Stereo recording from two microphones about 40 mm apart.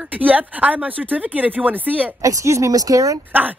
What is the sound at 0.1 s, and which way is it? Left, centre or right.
Speech, right.